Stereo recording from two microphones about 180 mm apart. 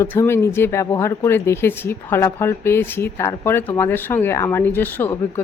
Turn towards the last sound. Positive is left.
turn(degrees=10)  # may be behind; listen again after turning